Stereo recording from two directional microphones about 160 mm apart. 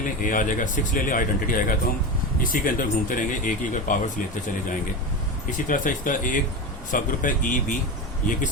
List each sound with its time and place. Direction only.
0.0 s speech: 55° left (ahead or behind)
5.5 s speech: 55° left (ahead or behind)